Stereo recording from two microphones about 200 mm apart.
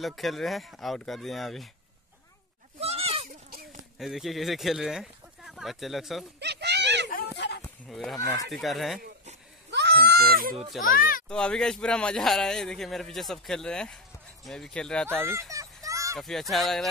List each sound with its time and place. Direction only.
0.0 s speech: centre (ahead or behind)
2.8 s goat: 30° right (ahead or behind)
3.3 s a sound: 50° right (ahead or behind)
4.0 s speech: centre (ahead or behind)
6.4 s a sound: 60° right (ahead or behind)
7.1 s a sound: 50° left (ahead or behind)
7.9 s speech: centre (ahead or behind)
9.7 s goat: 60° right (ahead or behind)
10.9 s speech: 45° left (ahead or behind)
11.2 s speech: 5° left (ahead or behind)
15.5 s children playing: 15° right (ahead or behind)
16.2 s speech: centre (ahead or behind)